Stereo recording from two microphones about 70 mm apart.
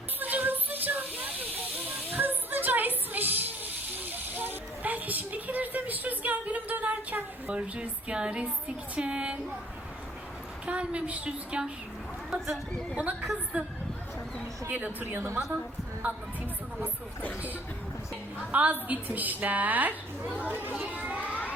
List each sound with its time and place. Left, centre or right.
0.2 s hiss: right
2.0 s music: right
3.9 s hiss: right
10.7 s a woman's voice: centre
12.3 s speech: centre
14.7 s a woman's voice: right
15.4 s a woman's voice: centre
18.3 s a woman's voice: right